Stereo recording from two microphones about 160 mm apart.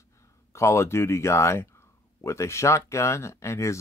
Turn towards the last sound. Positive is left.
turn(degrees=20)  # may be behind; listen again after turning